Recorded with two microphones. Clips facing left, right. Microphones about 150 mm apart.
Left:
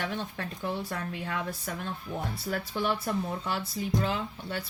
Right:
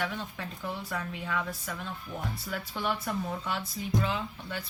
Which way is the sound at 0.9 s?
50° left (ahead or behind).